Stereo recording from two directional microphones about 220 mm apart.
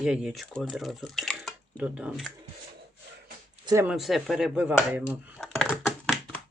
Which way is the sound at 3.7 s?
15° right (ahead or behind).